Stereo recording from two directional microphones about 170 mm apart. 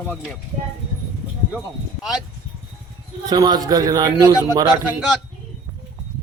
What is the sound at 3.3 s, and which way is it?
A man's voice, 25° right (ahead or behind).